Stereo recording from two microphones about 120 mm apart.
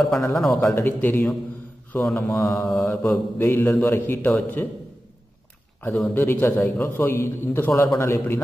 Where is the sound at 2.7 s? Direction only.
Centre (ahead or behind).